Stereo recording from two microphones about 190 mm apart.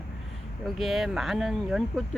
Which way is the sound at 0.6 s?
Centre (ahead or behind).